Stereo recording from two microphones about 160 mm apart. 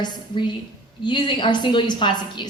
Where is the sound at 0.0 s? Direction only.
30° left (ahead or behind).